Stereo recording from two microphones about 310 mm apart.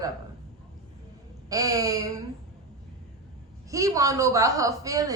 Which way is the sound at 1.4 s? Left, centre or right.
Centre.